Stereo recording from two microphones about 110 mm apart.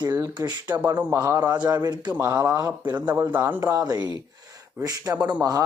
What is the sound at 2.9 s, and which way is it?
A man's voice, 20° right (ahead or behind).